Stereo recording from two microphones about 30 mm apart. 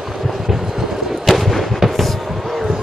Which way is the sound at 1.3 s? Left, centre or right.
Centre.